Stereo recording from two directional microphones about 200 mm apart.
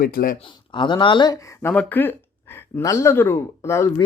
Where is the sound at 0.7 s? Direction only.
25° left (ahead or behind).